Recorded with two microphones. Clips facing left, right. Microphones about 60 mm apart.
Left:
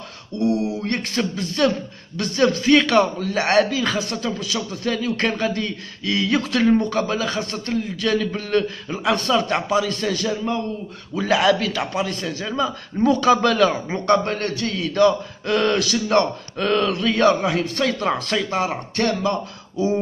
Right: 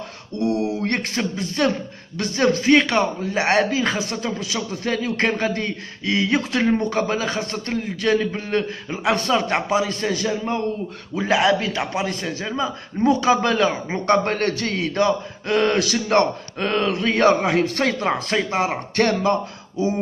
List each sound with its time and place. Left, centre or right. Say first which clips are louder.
0.4 s a sound: even; right
1.3 s speech: left 1 dB; centre
8.3 s a man's voice: left 2 dB; right
12.0 s speech: even; right
14.2 s a man's voice: right 2 dB; right
15.0 s speech: left 2 dB; right
17.9 s a man's voice: even; right